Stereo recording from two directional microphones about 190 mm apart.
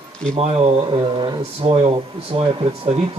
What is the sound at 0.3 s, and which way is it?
Speech, 30° right (ahead or behind).